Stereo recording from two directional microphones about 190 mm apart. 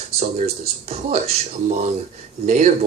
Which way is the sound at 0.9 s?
35° right (ahead or behind).